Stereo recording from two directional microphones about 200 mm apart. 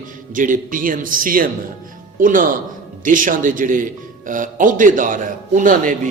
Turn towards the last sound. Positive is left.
turn(degrees=-40)  # may be behind; listen again after turning